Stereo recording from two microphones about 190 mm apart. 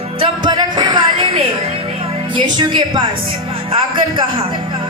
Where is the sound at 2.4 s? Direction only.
25° right (ahead or behind).